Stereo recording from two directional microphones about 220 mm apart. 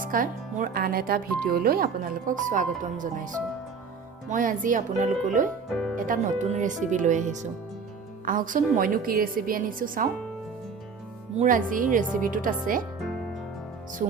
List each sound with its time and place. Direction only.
0.0 s speech: 40° right (ahead or behind)
4.3 s speech: 35° right (ahead or behind)
11.3 s speech: 35° right (ahead or behind)